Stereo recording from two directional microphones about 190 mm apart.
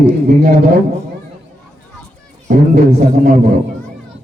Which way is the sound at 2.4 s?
50° right (ahead or behind).